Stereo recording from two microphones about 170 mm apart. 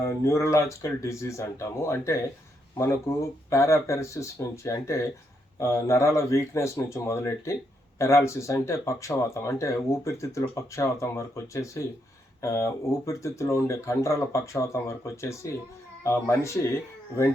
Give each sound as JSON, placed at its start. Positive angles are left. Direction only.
{"t": 0.0, "sound": "speech", "side_deg": 15}